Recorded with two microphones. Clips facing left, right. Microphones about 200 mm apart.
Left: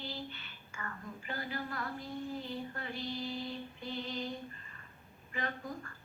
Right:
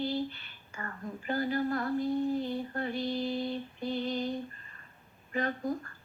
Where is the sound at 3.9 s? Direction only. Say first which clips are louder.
Right 7 dB; 35° right (ahead or behind).